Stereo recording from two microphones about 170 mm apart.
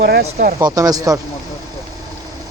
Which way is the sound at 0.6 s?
20° right (ahead or behind).